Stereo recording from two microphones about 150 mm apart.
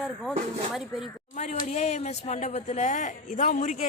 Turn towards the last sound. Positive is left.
turn(degrees=60)  # may be behind; listen again after turning